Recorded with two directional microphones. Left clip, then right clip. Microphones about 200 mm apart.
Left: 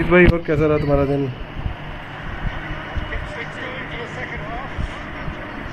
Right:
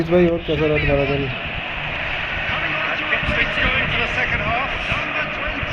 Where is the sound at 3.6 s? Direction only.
65° right (ahead or behind).